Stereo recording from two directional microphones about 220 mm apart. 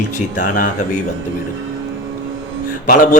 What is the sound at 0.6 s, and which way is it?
Speech, 35° left (ahead or behind).